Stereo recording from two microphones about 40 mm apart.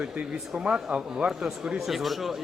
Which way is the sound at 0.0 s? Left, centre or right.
Right.